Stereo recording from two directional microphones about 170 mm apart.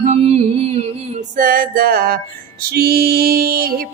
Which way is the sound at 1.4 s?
55° right (ahead or behind).